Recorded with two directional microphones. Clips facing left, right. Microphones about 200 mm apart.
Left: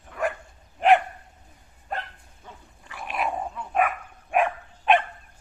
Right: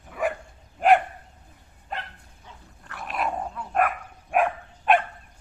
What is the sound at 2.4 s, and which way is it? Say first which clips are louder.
Dog: left 3 dB; 50° left (ahead or behind).